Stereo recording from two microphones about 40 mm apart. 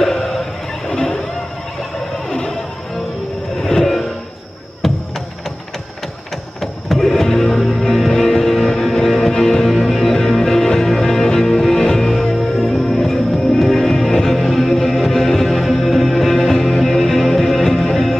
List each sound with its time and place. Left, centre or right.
0.0 s a sound: centre
3.5 s train: centre
4.8 s music: centre
6.6 s music: centre